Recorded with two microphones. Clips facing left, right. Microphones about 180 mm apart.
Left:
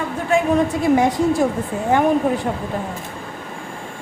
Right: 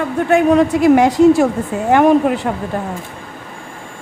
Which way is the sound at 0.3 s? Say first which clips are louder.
Right 5 dB; 65° right (ahead or behind).